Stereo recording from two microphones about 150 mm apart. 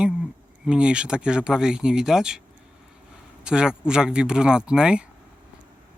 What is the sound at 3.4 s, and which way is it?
Speech, 5° right (ahead or behind).